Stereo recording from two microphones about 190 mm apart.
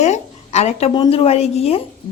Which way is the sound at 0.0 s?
35° left (ahead or behind).